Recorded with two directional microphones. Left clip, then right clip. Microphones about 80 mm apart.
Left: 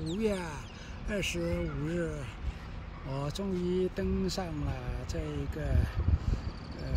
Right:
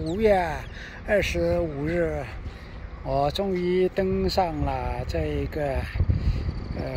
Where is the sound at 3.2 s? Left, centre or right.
Right.